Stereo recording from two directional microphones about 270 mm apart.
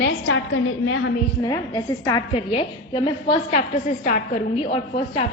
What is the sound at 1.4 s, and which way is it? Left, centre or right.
A woman's voice, centre.